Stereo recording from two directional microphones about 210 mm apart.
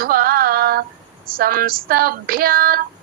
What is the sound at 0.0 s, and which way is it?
Female singing, 45° right (ahead or behind).